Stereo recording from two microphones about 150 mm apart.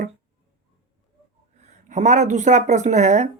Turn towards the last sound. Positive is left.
turn(degrees=-50)  # may be behind; listen again after turning